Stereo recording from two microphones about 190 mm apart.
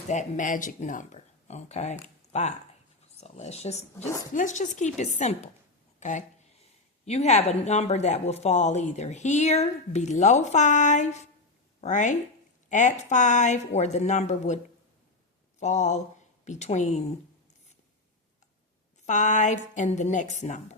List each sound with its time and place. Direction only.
0.1 s speech: 40° left (ahead or behind)
15.6 s speech: 40° left (ahead or behind)
19.0 s speech: 40° left (ahead or behind)